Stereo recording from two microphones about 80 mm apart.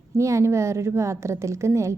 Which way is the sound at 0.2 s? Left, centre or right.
Right.